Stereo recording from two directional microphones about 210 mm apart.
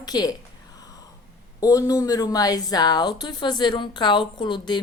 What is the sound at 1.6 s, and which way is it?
A woman's voice, 15° left (ahead or behind).